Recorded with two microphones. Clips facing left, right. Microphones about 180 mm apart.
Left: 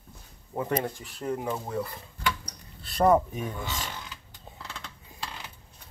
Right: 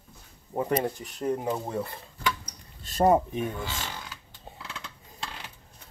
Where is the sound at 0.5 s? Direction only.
20° right (ahead or behind).